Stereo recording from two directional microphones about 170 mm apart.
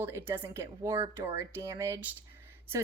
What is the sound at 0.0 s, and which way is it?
Speech, 15° right (ahead or behind).